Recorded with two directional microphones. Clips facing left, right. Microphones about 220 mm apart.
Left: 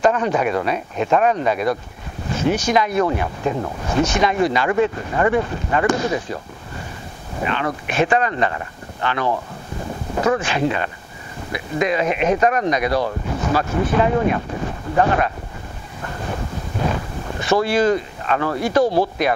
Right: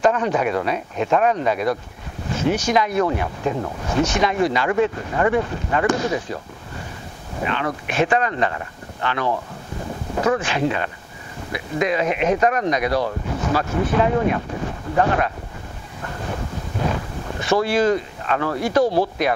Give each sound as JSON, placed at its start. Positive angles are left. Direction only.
{"t": 0.0, "sound": "speech", "side_deg": 20}
{"t": 4.0, "sound": "speech", "side_deg": 15}
{"t": 7.3, "sound": "speech", "side_deg": 20}
{"t": 10.1, "sound": "a sound", "side_deg": 25}
{"t": 10.4, "sound": "speech", "side_deg": 15}
{"t": 16.0, "sound": "waves", "side_deg": 20}
{"t": 16.8, "sound": "speech", "side_deg": 20}